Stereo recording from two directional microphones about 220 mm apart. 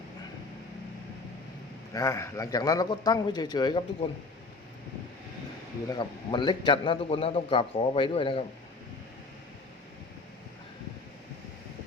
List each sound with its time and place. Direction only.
1.9 s a man's voice: 15° left (ahead or behind)
5.9 s a man's voice: 20° left (ahead or behind)